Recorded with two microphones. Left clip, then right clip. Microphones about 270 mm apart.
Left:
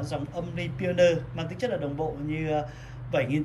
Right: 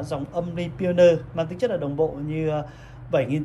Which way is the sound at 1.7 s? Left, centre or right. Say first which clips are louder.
Right 3 dB; right.